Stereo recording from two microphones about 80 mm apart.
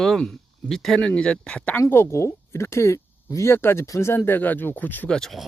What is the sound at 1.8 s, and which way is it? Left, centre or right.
Speech, left.